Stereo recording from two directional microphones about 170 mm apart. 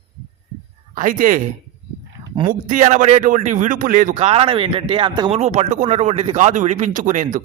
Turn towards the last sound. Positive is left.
turn(degrees=-50)  # may be behind; listen again after turning